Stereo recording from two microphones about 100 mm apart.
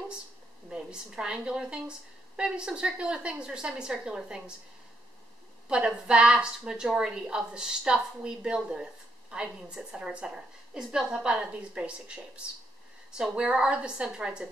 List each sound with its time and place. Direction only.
0.7 s a woman's voice: 10° right (ahead or behind)
5.7 s a woman's voice: 10° right (ahead or behind)
13.2 s a woman's voice: 5° right (ahead or behind)